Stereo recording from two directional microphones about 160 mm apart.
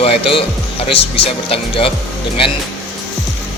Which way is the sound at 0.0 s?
35° left (ahead or behind).